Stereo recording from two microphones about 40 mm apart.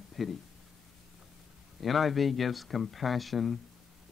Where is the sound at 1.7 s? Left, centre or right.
Centre.